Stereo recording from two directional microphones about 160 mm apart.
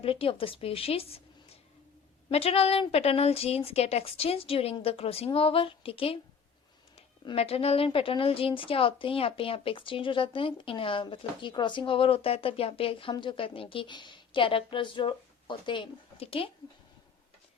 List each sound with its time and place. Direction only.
0.0 s a woman's voice: 35° left (ahead or behind)
2.3 s a woman's voice: 40° left (ahead or behind)
7.3 s a woman's voice: 40° left (ahead or behind)